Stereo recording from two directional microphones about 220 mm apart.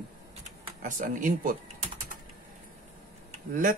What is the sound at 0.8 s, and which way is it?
Speech, 35° right (ahead or behind).